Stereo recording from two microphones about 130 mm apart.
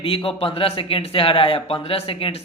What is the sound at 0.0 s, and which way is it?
Speech, 45° left (ahead or behind).